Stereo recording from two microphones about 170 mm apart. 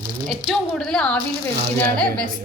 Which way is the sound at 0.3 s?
Centre (ahead or behind).